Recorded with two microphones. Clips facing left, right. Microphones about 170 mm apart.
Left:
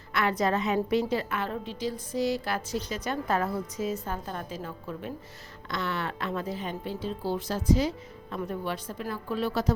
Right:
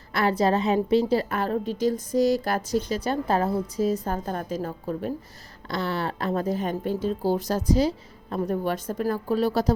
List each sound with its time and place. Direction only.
0.1 s a woman's voice: 35° right (ahead or behind)